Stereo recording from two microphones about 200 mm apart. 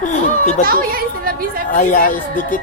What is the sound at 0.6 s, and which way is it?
A woman's voice, 45° right (ahead or behind).